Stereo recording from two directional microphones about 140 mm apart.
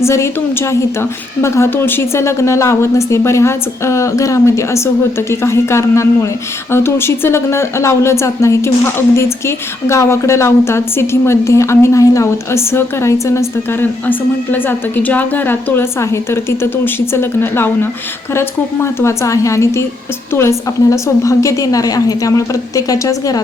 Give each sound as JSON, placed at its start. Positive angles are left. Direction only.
{"t": 0.0, "sound": "a woman's voice", "side_deg": 20}